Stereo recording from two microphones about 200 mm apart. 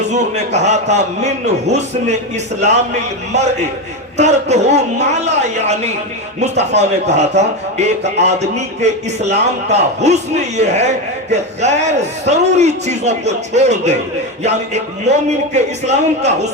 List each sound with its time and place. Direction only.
0.1 s a man's voice: 35° right (ahead or behind)
4.2 s a man's voice: 35° right (ahead or behind)